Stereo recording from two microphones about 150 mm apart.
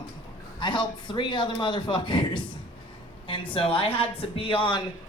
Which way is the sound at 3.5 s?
35° left (ahead or behind).